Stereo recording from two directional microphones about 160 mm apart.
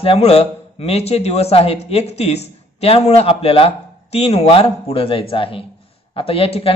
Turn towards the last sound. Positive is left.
turn(degrees=35)  # may be behind; listen again after turning